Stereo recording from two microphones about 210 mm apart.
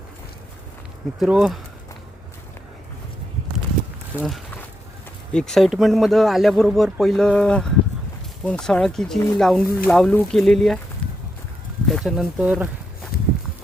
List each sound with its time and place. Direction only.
1.2 s a man's voice: 5° right (ahead or behind)
4.2 s a sound: centre (ahead or behind)
5.3 s a man's voice: 5° left (ahead or behind)
11.0 s a sound: 5° left (ahead or behind)
11.9 s a man's voice: centre (ahead or behind)
13.1 s walk: 45° left (ahead or behind)